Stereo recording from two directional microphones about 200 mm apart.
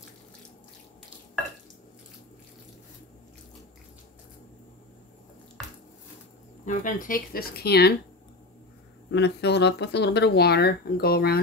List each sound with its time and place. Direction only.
6.6 s speech: 40° left (ahead or behind)
9.1 s speech: 60° left (ahead or behind)